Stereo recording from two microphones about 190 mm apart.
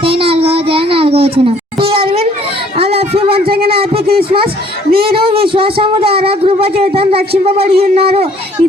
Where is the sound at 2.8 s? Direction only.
30° right (ahead or behind).